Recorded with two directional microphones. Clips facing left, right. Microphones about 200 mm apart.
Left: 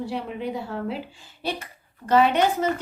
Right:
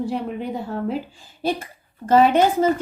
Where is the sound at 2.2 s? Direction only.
40° right (ahead or behind).